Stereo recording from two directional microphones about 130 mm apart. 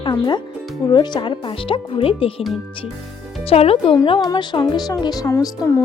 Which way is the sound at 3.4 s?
50° left (ahead or behind).